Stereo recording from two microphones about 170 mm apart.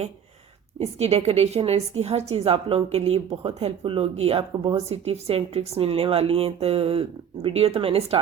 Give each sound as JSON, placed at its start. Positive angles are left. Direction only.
{"t": 0.8, "sound": "a woman's voice", "side_deg": -40}